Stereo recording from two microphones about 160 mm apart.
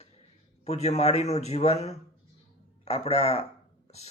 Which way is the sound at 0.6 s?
40° left (ahead or behind).